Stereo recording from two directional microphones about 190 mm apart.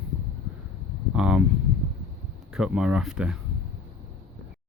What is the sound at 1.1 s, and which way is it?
Speech, 5° right (ahead or behind).